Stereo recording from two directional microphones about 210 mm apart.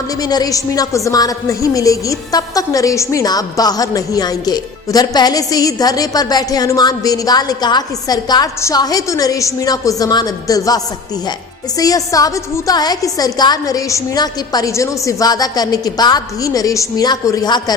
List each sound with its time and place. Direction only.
0.2 s a woman's voice: 20° left (ahead or behind)
11.8 s a woman's voice: 15° left (ahead or behind)